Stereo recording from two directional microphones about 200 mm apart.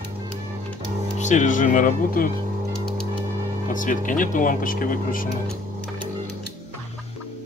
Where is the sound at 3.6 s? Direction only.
40° left (ahead or behind).